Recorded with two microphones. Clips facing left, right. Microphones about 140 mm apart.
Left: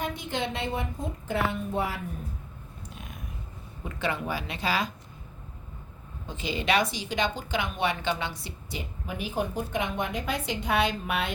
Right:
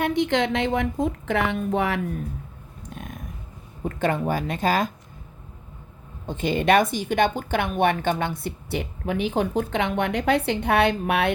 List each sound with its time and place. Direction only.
0.0 s a woman's voice: 80° right
2.9 s a sound: 50° right (ahead or behind)
3.8 s speech: 50° right (ahead or behind)
6.2 s a woman's voice: 50° right (ahead or behind)